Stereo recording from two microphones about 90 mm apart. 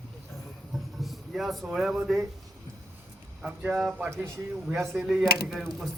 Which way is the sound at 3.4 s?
15° right (ahead or behind).